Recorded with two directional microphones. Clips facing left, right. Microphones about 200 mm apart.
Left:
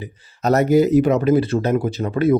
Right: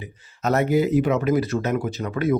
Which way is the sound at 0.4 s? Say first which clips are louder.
Left 5 dB; 40° left (ahead or behind).